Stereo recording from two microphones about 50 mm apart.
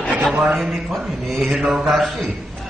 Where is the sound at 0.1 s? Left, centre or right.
Right.